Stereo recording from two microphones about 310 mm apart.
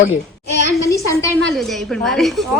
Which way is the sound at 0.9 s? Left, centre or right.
Centre.